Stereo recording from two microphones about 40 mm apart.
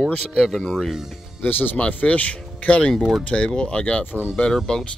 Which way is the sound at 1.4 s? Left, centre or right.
Left.